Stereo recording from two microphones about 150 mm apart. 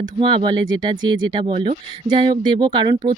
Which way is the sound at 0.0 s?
35° right (ahead or behind).